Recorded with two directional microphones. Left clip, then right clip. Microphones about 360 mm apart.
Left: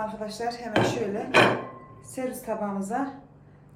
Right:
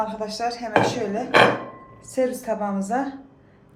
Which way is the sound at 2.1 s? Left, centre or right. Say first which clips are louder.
Right 8 dB; right.